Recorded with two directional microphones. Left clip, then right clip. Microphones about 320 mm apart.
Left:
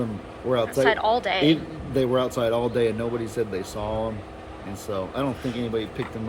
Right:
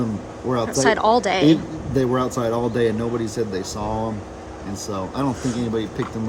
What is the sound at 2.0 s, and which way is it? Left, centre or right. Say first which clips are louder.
A man's voice: right 1 dB; centre.